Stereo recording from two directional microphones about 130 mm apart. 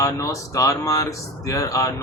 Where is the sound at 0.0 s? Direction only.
25° left (ahead or behind).